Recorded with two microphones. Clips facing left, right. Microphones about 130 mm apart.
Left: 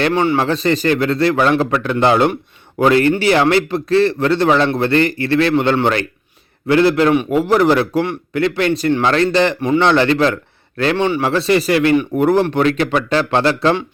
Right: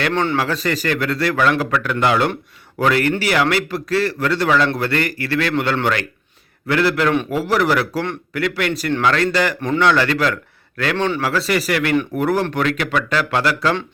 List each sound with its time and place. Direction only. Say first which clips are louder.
0.1 s speech: left 4 dB; 10° left (ahead or behind)
0.3 s a man's voice: left 4 dB; 25° left (ahead or behind)
10.9 s speech: left 2 dB; 10° left (ahead or behind)
11.2 s a man's voice: left 5 dB; 25° left (ahead or behind)